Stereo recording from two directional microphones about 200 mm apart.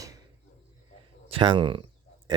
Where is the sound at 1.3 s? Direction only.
25° right (ahead or behind).